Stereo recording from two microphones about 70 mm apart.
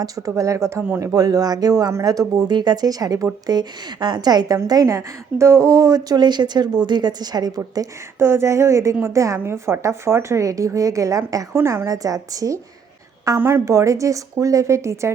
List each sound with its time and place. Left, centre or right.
0.0 s a woman's voice: right
0.9 s speech: right
3.4 s a woman's voice: right
4.5 s a woman's voice: right
6.1 s a woman's voice: right
8.2 s a woman's voice: right
11.5 s a woman's voice: right
13.4 s a woman's voice: right